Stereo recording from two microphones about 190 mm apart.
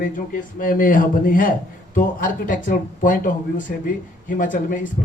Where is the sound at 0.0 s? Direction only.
45° left (ahead or behind).